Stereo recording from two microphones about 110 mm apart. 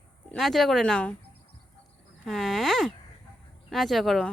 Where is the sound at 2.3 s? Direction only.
Centre (ahead or behind).